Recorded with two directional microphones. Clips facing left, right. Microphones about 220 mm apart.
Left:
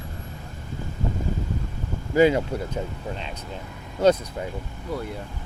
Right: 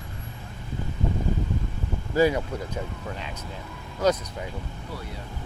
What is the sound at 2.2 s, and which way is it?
Speech, 20° left (ahead or behind).